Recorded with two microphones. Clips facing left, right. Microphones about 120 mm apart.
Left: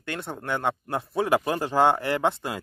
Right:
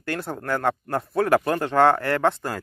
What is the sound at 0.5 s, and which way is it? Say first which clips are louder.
Speech: right 3 dB; centre (ahead or behind).